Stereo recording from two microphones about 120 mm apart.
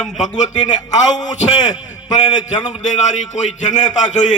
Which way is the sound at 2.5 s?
80° left.